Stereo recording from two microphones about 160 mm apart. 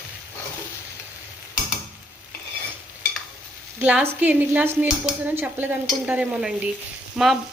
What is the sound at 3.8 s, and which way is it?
Stir, 10° right (ahead or behind).